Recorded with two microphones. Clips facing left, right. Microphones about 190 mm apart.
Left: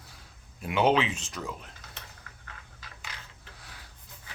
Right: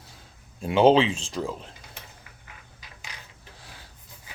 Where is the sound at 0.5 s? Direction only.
30° right (ahead or behind).